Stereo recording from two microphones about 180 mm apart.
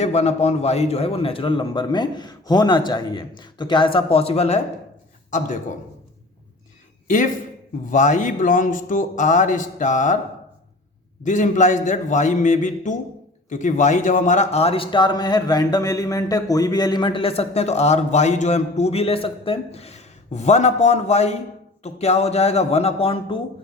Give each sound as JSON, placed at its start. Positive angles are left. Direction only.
{"t": 0.0, "sound": "a man's voice", "side_deg": 40}
{"t": 7.9, "sound": "a man's voice", "side_deg": 45}
{"t": 11.2, "sound": "a man's voice", "side_deg": 45}